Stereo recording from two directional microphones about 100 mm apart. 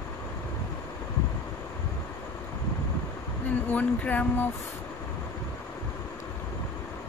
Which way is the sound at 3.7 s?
15° left (ahead or behind).